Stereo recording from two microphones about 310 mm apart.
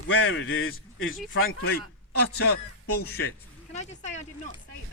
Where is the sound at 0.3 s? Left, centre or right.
Left.